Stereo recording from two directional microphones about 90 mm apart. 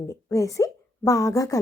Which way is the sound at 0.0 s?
35° left (ahead or behind).